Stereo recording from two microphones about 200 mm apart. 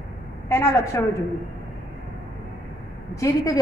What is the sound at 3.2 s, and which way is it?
Speech, 15° left (ahead or behind).